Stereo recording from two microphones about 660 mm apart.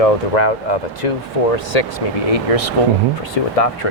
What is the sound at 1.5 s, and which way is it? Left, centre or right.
Speech, left.